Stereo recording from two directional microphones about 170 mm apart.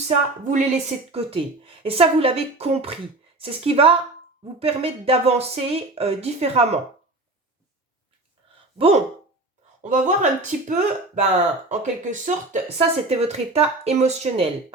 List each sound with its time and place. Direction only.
0.4 s a woman's voice: 40° right (ahead or behind)
9.8 s a woman's voice: 45° right (ahead or behind)